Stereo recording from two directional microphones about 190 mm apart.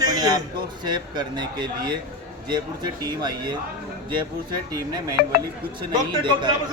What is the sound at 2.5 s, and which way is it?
A man's voice, 25° right (ahead or behind).